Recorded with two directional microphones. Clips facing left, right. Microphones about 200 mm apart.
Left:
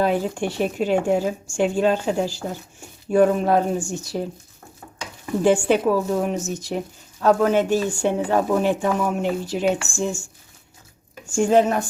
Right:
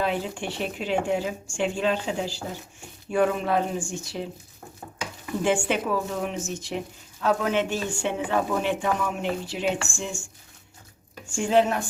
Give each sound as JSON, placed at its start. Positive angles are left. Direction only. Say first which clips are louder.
{"t": 0.0, "sound": "speech", "louder": "left 6 dB", "side_deg": 45}
{"t": 5.4, "sound": "speech", "louder": "left 7 dB", "side_deg": 40}
{"t": 11.3, "sound": "speech", "louder": "left 4 dB", "side_deg": 45}